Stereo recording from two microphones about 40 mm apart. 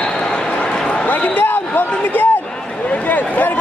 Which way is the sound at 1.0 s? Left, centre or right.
Left.